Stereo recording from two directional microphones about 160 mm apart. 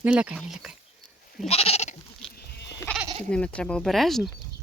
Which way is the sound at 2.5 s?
90° left.